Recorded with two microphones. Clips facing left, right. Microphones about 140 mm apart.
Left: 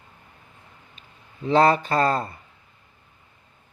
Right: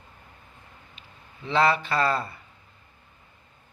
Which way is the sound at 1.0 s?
45° left (ahead or behind).